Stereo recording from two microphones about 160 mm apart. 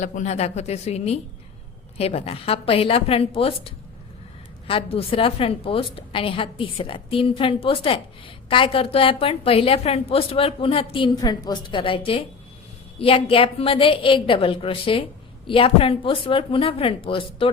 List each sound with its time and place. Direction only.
0.0 s a woman's voice: 50° left (ahead or behind)
4.7 s a woman's voice: 35° left (ahead or behind)